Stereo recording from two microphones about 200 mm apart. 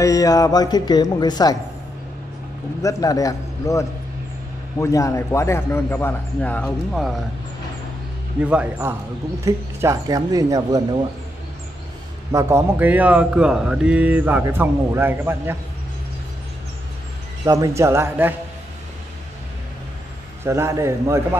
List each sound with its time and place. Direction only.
0.0 s speech: 15° left (ahead or behind)
2.8 s a man's voice: 15° left (ahead or behind); by 7.2 s centre (ahead or behind)
8.4 s speech: 5° right (ahead or behind)
12.3 s speech: 15° right (ahead or behind)
17.5 s speech: 15° right (ahead or behind)
20.4 s speech: 15° right (ahead or behind)